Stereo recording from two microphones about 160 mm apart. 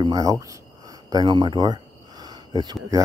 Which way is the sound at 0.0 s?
20° right (ahead or behind).